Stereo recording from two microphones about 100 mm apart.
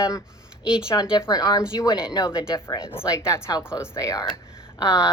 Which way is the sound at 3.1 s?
30° left (ahead or behind).